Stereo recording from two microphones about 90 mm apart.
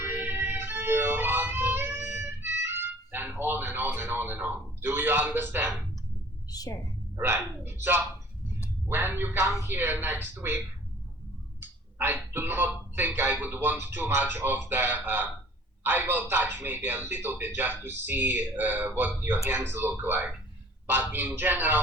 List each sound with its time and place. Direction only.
0.0 s music: 20° right (ahead or behind)
6.5 s a sound: 45° left (ahead or behind)
7.2 s speech: 25° right (ahead or behind)
11.9 s speech: 25° right (ahead or behind)